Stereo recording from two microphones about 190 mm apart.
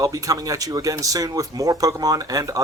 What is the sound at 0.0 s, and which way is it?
Speech, 20° right (ahead or behind).